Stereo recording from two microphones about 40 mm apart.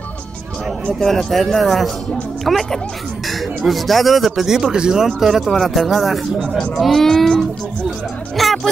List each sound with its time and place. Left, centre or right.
0.9 s speech: centre
4.6 s speech: centre
5.0 s speech: centre
6.6 s speech: centre
8.4 s a sound: centre